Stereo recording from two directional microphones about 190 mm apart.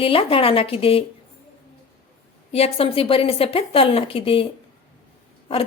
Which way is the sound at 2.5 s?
30° left (ahead or behind).